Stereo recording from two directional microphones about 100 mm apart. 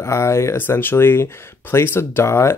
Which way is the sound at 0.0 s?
30° left (ahead or behind).